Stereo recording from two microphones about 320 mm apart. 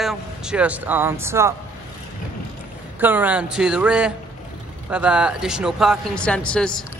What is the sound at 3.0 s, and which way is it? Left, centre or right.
Speech, centre.